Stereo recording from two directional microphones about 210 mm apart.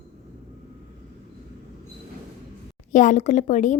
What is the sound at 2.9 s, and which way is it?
Speech, 35° left (ahead or behind).